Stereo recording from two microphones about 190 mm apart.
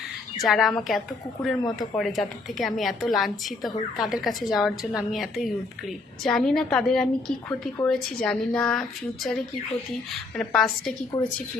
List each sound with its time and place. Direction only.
0.4 s a woman's voice: centre (ahead or behind)
10.3 s a woman's voice: centre (ahead or behind)
11.1 s speech: 20° left (ahead or behind)